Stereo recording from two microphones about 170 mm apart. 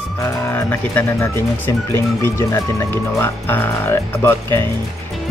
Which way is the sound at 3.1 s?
15° left (ahead or behind).